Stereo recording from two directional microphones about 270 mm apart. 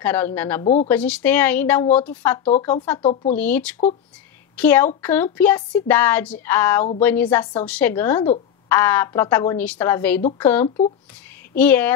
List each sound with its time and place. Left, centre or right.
0.0 s speech: centre
3.0 s speech: left
3.3 s speech: centre